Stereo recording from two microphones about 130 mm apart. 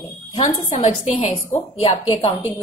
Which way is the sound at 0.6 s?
60° left (ahead or behind).